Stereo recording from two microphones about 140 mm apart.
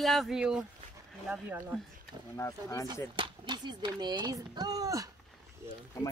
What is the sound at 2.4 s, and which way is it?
Speech, 20° left (ahead or behind).